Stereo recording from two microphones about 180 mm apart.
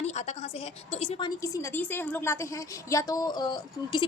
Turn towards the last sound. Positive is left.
turn(degrees=25)  # may be behind; listen again after turning